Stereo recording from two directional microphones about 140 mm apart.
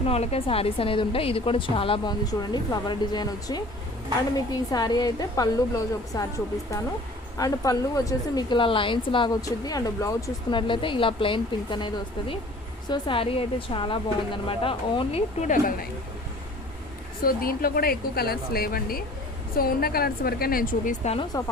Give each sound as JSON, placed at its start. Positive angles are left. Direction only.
{"t": 0.0, "sound": "a woman's voice", "side_deg": 45}
{"t": 2.2, "sound": "a woman's voice", "side_deg": 30}
{"t": 7.3, "sound": "a woman's voice", "side_deg": 25}
{"t": 10.5, "sound": "a woman's voice", "side_deg": 35}
{"t": 12.9, "sound": "a woman's voice", "side_deg": 40}
{"t": 15.4, "sound": "a woman's voice", "side_deg": 75}
{"t": 17.2, "sound": "a woman's voice", "side_deg": 90}
{"t": 21.0, "sound": "speech", "side_deg": 45}